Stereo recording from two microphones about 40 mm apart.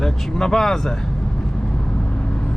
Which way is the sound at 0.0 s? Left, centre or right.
Centre.